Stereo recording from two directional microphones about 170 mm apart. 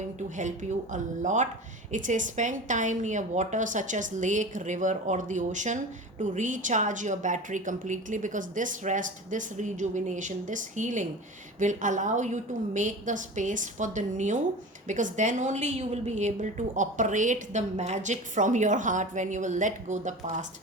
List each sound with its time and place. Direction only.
0.3 s a woman's voice: 45° right (ahead or behind)